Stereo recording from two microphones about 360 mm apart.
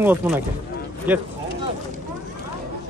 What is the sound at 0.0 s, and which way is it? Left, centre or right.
A man's voice, centre.